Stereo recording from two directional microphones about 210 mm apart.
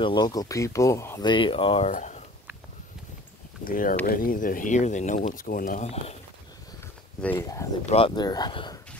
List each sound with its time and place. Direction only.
0.0 s speech: 20° left (ahead or behind)
3.6 s speech: 40° left (ahead or behind)
7.2 s speech: 10° left (ahead or behind)
7.8 s speech: 25° left (ahead or behind)